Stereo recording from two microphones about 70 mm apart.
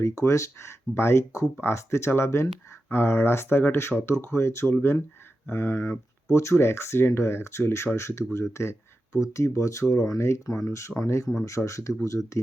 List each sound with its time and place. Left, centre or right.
0.0 s speech: left